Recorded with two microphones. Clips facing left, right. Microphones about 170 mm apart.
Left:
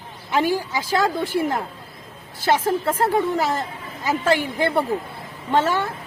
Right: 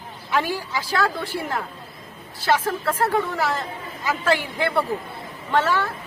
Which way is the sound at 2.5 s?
20° left (ahead or behind).